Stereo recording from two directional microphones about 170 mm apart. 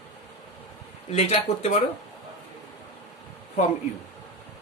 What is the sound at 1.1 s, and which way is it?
Speech, 35° left (ahead or behind).